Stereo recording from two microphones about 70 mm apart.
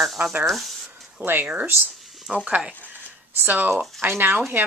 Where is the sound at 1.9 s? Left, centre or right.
Centre.